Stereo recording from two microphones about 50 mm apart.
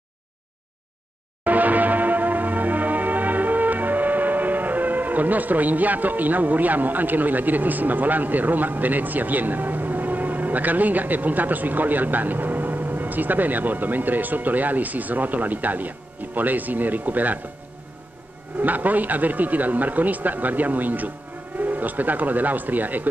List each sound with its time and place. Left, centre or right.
1.4 s music: right
16.3 s a man's voice: right
18.6 s a man's voice: right